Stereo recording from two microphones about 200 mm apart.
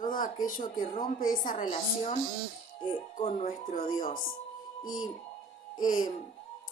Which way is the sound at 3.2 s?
30° left (ahead or behind).